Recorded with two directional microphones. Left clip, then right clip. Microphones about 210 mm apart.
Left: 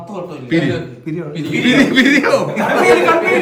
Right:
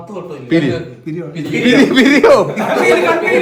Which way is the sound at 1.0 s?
5° left (ahead or behind).